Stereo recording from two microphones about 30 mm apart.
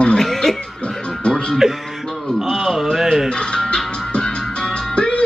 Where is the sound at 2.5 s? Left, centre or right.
Centre.